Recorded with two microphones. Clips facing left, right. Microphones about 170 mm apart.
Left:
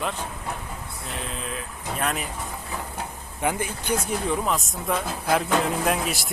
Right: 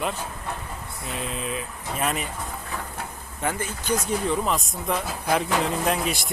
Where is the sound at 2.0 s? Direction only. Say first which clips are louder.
Right 1 dB; centre (ahead or behind).